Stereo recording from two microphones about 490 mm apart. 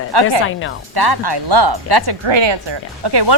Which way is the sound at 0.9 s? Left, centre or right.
Right.